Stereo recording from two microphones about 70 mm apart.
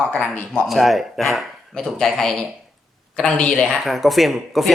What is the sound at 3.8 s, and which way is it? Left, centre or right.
Speech, centre.